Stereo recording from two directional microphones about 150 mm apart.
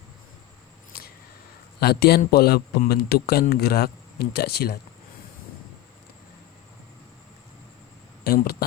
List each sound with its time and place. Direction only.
1.8 s a man's voice: 90° left
8.2 s speech: 90° left